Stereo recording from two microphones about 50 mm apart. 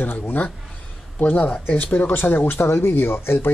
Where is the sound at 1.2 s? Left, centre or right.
Left.